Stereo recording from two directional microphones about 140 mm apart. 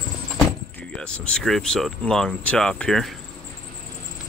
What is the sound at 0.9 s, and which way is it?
Speech, 5° left (ahead or behind).